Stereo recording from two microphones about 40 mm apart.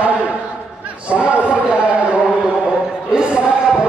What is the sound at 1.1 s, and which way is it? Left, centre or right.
Speech, right.